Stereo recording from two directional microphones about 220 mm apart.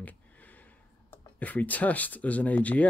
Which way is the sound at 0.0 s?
5° left (ahead or behind).